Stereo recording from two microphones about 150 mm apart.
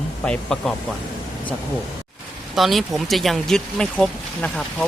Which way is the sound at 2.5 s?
Centre (ahead or behind).